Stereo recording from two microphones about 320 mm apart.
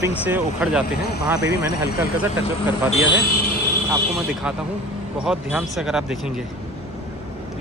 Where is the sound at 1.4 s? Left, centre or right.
Left.